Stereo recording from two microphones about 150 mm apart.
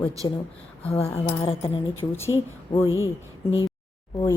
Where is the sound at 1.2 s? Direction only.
35° left (ahead or behind).